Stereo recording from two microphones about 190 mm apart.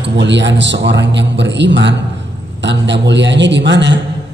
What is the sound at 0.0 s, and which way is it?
A man's voice, 70° right (ahead or behind).